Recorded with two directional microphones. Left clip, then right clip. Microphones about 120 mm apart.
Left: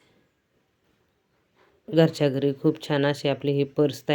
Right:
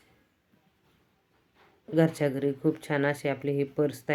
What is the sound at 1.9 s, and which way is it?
Speech, 40° left (ahead or behind).